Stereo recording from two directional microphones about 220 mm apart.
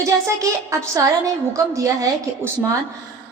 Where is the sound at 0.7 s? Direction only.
15° right (ahead or behind).